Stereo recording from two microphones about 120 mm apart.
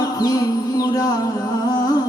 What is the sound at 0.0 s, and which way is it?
Music, 35° left (ahead or behind).